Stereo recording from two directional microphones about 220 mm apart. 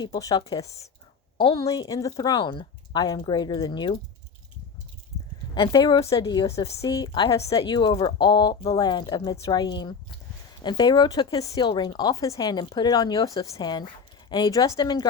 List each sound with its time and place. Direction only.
0.0 s speech: 20° left (ahead or behind)
5.5 s speech: 20° left (ahead or behind)